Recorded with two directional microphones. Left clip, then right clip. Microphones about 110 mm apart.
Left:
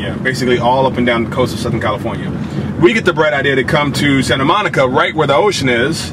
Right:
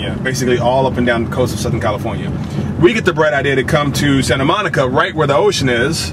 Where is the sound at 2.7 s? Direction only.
5° left (ahead or behind).